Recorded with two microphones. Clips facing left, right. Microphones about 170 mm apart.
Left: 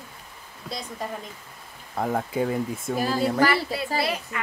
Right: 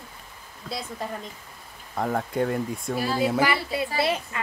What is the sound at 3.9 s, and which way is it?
Speech, 25° right (ahead or behind).